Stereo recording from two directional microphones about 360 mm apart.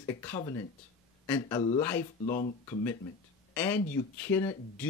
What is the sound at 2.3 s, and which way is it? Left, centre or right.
Speech, centre.